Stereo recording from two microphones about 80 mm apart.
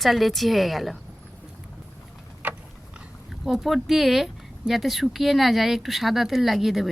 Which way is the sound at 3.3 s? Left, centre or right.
Centre.